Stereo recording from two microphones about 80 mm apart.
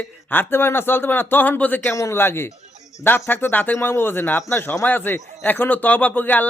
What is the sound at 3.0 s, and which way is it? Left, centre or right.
A man's voice, left.